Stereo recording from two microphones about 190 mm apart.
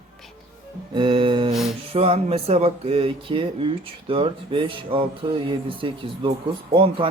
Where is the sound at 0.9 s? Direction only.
25° right (ahead or behind).